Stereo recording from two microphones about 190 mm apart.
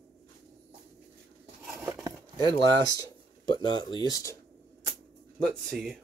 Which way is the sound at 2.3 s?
20° left (ahead or behind).